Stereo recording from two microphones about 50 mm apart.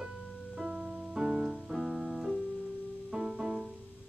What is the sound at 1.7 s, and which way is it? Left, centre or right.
Piano, centre.